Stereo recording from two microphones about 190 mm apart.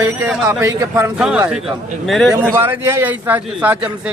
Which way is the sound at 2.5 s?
10° right (ahead or behind).